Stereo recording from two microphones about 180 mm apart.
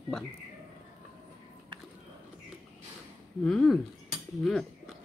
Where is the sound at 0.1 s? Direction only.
Centre (ahead or behind).